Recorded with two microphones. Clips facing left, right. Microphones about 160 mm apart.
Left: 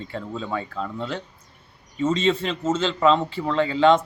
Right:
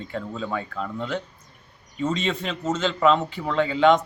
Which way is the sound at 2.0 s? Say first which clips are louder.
Left 4 dB; centre (ahead or behind).